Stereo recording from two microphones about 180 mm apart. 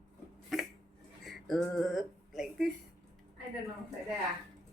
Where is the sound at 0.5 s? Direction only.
Centre (ahead or behind).